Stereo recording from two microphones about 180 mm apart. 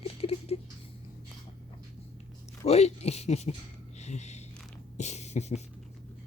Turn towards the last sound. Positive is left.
turn(degrees=40)  # may be behind; listen again after turning